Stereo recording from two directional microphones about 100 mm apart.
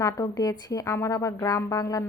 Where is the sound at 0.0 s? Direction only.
35° left (ahead or behind).